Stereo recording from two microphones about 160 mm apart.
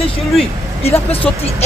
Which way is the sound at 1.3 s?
5° left (ahead or behind).